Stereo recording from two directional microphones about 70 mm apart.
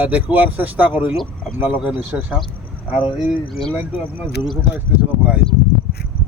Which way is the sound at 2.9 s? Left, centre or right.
Centre.